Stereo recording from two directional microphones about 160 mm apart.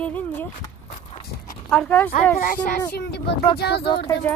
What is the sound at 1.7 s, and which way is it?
Speech, 10° left (ahead or behind).